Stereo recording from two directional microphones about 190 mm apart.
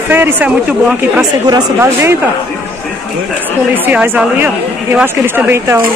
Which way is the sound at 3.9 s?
5° right (ahead or behind).